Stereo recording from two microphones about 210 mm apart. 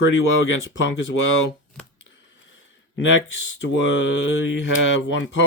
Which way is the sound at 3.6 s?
65° left (ahead or behind).